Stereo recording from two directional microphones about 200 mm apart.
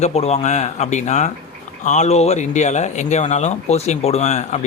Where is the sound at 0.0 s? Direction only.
30° left (ahead or behind).